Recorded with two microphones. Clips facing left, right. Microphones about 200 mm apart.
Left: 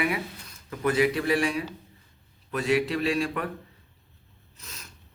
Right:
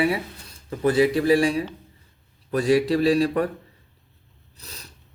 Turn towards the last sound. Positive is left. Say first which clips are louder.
# right 3 dB
turn(degrees=-35)  # may be behind; listen again after turning